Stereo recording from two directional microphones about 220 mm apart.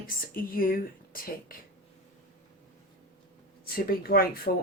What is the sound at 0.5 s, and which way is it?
Speech, 40° left (ahead or behind).